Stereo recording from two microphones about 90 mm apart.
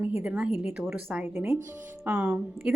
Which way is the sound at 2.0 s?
15° right (ahead or behind).